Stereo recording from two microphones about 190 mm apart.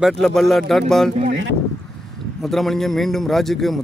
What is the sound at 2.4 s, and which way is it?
Speech, centre (ahead or behind).